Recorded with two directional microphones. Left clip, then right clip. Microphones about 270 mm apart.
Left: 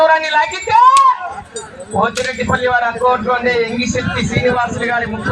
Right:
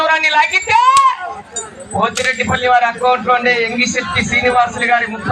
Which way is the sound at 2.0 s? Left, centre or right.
Right.